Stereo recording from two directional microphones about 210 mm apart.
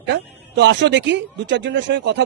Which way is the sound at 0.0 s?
55° right (ahead or behind).